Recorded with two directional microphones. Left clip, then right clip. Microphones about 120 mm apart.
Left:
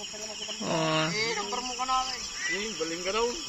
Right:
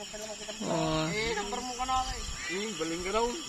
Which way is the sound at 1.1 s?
40° right (ahead or behind).